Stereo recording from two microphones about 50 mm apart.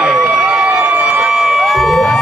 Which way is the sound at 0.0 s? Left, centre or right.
Centre.